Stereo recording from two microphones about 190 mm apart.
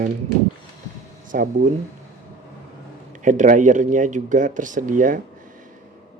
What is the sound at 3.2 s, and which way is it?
Speech, 40° right (ahead or behind).